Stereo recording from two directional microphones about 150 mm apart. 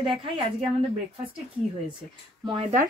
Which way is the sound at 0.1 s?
35° right (ahead or behind).